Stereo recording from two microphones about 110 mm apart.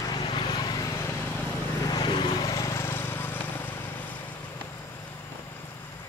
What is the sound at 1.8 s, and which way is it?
Vehicle, 40° left (ahead or behind).